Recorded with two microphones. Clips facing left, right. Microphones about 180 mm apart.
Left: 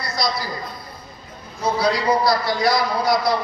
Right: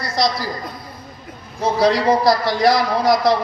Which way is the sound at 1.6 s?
90° right.